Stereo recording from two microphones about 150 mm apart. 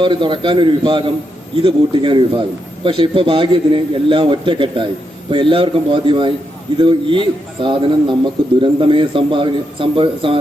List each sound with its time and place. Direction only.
0.0 s a man's voice: 30° right (ahead or behind)